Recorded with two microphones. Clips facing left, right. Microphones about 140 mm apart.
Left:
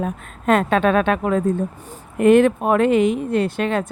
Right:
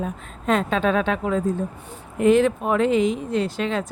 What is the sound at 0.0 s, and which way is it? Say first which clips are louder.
Speech: left 4 dB; 60° left (ahead or behind).